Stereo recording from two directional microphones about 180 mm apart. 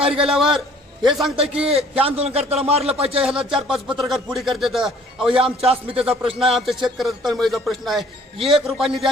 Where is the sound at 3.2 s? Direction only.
5° right (ahead or behind).